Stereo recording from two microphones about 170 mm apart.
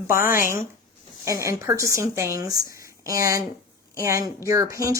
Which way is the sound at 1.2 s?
20° right (ahead or behind).